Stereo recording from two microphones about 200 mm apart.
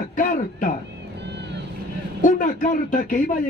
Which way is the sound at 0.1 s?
40° left (ahead or behind).